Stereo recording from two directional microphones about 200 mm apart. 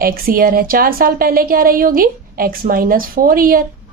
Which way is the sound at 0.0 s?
45° right (ahead or behind).